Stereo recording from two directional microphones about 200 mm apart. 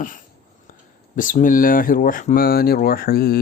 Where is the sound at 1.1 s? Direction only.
40° left (ahead or behind).